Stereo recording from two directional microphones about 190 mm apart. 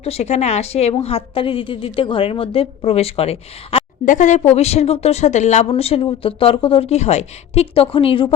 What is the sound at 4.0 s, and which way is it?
Speech, 40° left (ahead or behind).